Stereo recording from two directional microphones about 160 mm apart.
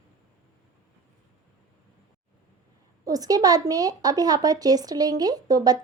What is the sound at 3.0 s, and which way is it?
A woman's voice, 25° right (ahead or behind).